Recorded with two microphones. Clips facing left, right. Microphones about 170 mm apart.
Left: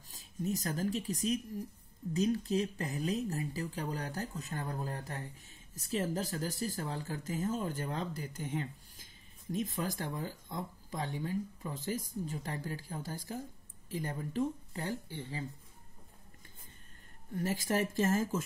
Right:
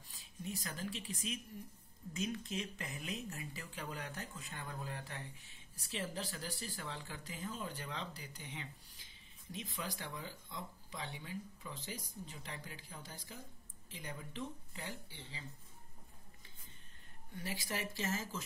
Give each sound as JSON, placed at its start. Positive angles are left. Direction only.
{"t": 0.1, "sound": "speech", "side_deg": 40}
{"t": 17.4, "sound": "speech", "side_deg": 45}